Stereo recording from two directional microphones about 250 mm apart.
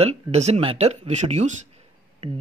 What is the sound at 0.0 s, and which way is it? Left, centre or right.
Speech, right.